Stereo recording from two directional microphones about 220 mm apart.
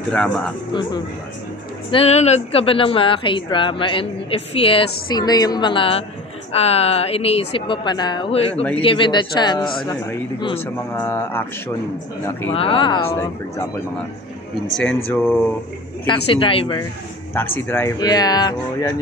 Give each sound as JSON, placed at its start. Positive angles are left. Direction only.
{"t": 0.1, "sound": "speech", "side_deg": 5}
{"t": 1.9, "sound": "a woman's voice", "side_deg": 25}
{"t": 12.5, "sound": "a woman's voice", "side_deg": 25}
{"t": 14.7, "sound": "speech", "side_deg": 5}
{"t": 16.3, "sound": "a woman's voice", "side_deg": 25}
{"t": 17.3, "sound": "speech", "side_deg": 10}